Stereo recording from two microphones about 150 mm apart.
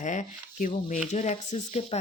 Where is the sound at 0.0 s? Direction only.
55° left (ahead or behind).